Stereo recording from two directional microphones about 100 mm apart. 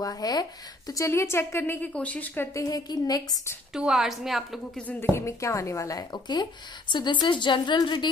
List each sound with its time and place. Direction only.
0.0 s speech: 40° left (ahead or behind); by 2.5 s 20° left (ahead or behind)
2.5 s speech: 40° left (ahead or behind)
3.7 s a woman's voice: 5° right (ahead or behind)
4.7 s a woman's voice: 20° left (ahead or behind); by 8.1 s 50° left (ahead or behind)